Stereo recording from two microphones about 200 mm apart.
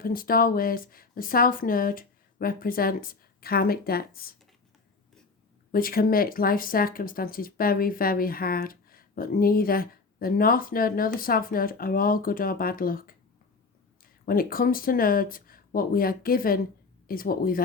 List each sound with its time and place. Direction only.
0.0 s speech: 45° left (ahead or behind)
5.7 s speech: 45° left (ahead or behind)